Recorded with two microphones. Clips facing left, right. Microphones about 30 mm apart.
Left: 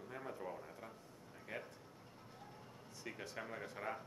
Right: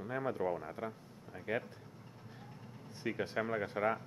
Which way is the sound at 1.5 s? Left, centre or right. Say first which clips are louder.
Right 11 dB; right.